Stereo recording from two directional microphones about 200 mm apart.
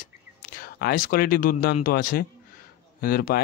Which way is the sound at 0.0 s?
45° left (ahead or behind).